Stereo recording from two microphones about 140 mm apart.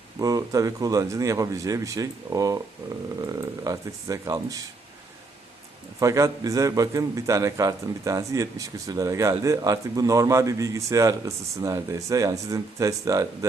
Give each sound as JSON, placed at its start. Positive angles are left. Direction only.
{"t": 0.2, "sound": "a man's voice", "side_deg": -25}
{"t": 6.0, "sound": "a man's voice", "side_deg": -20}